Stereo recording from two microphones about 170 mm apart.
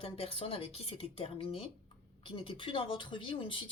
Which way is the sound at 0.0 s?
35° left (ahead or behind).